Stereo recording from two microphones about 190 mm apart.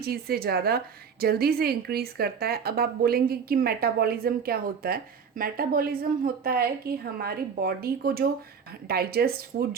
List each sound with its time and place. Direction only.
0.0 s speech: 55° right (ahead or behind)